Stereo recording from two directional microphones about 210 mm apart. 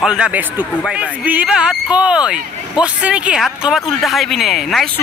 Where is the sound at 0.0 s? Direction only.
5° right (ahead or behind).